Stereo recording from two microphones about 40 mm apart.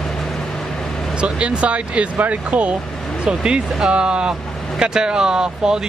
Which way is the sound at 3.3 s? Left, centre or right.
Right.